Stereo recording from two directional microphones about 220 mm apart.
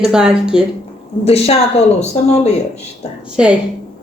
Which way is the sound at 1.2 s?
25° left (ahead or behind).